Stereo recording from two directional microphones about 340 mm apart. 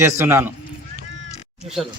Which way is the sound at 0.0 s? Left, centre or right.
Centre.